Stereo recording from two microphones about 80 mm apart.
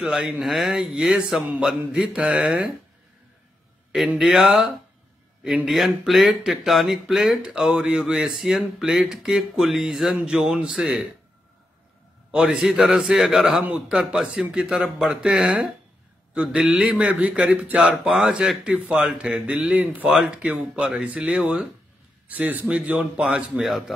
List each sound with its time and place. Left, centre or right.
0.0 s speech: centre
3.9 s speech: centre
12.3 s speech: centre
17.1 s speech: centre